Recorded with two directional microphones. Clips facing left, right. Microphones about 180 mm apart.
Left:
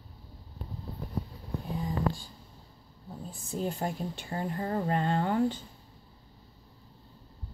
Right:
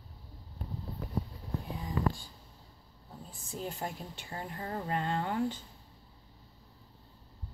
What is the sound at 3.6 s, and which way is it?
Speech, 40° left (ahead or behind).